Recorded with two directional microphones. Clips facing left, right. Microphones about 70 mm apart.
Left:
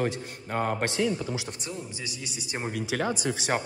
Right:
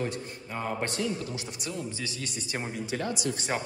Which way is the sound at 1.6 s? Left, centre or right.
Left.